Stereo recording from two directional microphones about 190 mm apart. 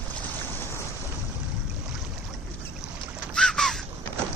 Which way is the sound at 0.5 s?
15° left (ahead or behind).